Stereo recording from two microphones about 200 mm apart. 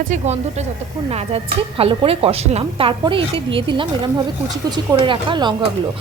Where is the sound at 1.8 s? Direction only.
25° right (ahead or behind).